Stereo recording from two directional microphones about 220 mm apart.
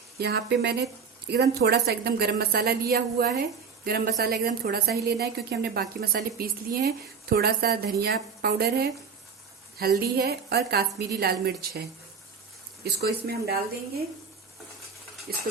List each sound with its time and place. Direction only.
0.2 s a woman's voice: 50° right (ahead or behind)
10.0 s a woman's voice: 45° right (ahead or behind)
15.3 s a woman's voice: 45° right (ahead or behind)